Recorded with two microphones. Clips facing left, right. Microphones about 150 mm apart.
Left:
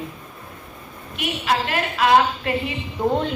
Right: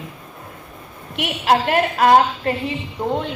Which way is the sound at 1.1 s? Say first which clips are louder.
Right 4 dB; 75° right (ahead or behind).